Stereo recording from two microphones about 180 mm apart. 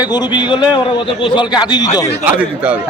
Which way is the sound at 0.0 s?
25° left (ahead or behind).